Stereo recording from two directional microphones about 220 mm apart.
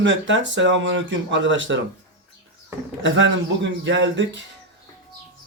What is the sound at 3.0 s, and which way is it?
Speech, 60° right (ahead or behind).